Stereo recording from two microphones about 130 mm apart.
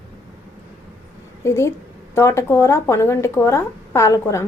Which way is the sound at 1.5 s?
20° left (ahead or behind).